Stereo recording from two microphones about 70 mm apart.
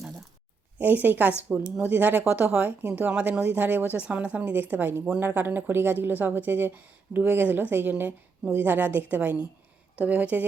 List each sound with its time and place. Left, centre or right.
0.8 s a woman's voice: right